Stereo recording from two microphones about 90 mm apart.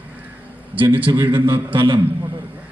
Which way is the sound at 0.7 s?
70° right (ahead or behind).